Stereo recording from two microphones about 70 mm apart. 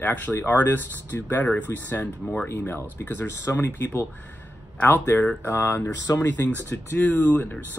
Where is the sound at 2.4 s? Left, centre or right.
Left.